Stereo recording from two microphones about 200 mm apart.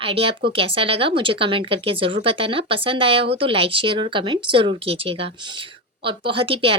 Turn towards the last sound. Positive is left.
turn(degrees=-25)  # may be behind; listen again after turning